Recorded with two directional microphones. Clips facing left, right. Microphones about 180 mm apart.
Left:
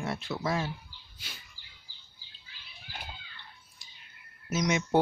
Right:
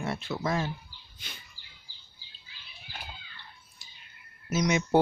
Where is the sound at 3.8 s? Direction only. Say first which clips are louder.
Right 1 dB; 5° right (ahead or behind).